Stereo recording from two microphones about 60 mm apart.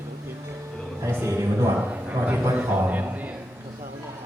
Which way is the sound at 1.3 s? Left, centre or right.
Right.